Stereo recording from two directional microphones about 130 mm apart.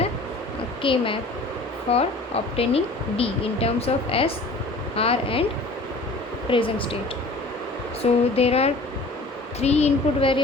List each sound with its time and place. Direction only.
0.8 s a woman's voice: 40° left (ahead or behind)
6.5 s speech: 40° left (ahead or behind)
8.0 s a woman's voice: 55° left (ahead or behind)